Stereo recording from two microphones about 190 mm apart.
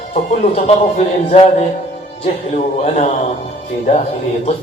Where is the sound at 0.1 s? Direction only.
35° left (ahead or behind).